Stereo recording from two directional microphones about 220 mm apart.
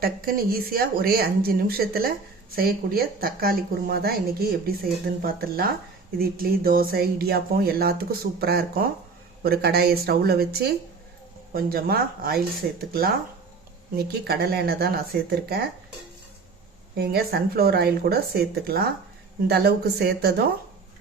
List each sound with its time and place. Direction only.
0.0 s speech: 40° right (ahead or behind)
13.9 s speech: 45° right (ahead or behind)
17.0 s speech: 45° right (ahead or behind)